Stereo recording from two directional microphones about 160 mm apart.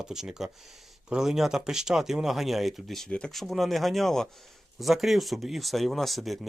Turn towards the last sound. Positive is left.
turn(degrees=0)  # may be behind; listen again after turning